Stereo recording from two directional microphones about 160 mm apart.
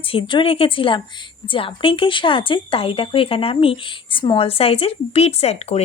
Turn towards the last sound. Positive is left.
turn(degrees=40)  # may be behind; listen again after turning